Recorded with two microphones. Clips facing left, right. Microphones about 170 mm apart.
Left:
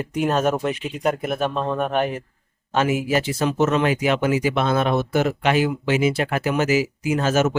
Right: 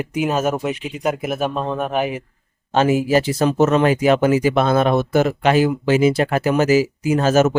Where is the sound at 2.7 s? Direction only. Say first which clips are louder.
Right 5 dB; 30° right (ahead or behind).